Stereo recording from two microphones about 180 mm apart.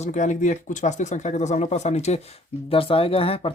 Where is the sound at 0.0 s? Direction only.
40° left (ahead or behind).